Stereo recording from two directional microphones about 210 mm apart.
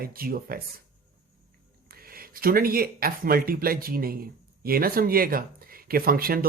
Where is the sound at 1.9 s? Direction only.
45° right (ahead or behind).